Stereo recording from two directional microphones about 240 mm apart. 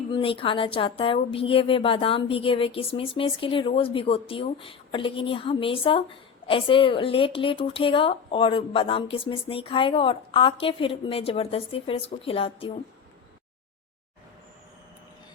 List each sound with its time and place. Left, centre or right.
0.1 s a woman's voice: left